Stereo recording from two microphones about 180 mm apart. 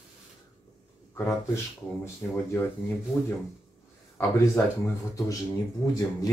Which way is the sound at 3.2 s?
10° left (ahead or behind).